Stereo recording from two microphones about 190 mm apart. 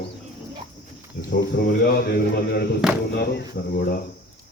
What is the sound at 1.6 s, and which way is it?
Speech, 55° left (ahead or behind).